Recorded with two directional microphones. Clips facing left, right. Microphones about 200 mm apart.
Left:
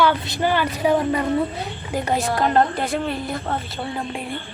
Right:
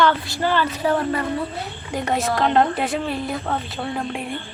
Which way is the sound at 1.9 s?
Centre (ahead or behind).